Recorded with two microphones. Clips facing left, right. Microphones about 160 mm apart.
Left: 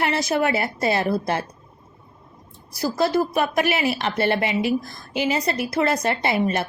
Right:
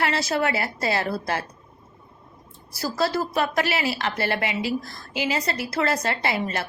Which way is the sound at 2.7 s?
20° left (ahead or behind).